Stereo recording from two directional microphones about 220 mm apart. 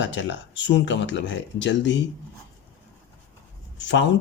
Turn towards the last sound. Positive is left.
turn(degrees=55)  # may be behind; listen again after turning